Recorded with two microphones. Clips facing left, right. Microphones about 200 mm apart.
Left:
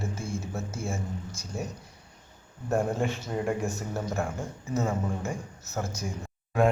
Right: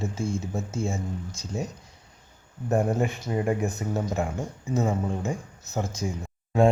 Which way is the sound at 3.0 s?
5° right (ahead or behind).